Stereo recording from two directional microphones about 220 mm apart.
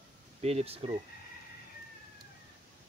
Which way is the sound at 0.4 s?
30° right (ahead or behind).